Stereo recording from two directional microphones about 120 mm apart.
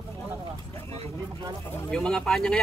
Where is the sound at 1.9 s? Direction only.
5° left (ahead or behind).